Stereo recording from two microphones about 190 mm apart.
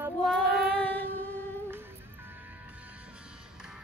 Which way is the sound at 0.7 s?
10° left (ahead or behind).